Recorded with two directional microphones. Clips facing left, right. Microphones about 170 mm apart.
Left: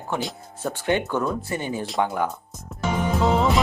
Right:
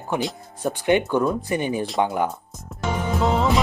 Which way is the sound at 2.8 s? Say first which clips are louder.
Left 1 dB; centre (ahead or behind).